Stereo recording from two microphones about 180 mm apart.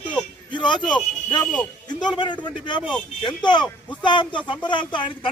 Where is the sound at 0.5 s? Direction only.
25° left (ahead or behind).